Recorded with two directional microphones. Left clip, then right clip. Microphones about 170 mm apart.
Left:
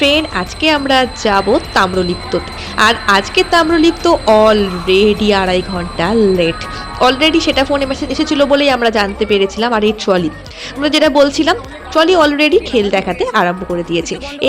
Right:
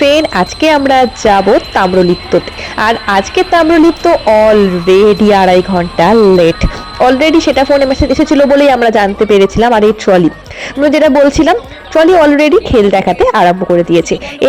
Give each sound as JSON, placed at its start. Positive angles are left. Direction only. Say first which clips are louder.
{"t": 0.0, "sound": "speech", "louder": "right 5 dB", "side_deg": -30}